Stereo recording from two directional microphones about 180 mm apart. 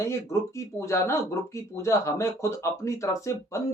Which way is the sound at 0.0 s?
15° left (ahead or behind).